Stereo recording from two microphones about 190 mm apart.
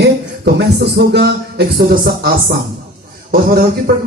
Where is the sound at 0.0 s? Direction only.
60° right (ahead or behind).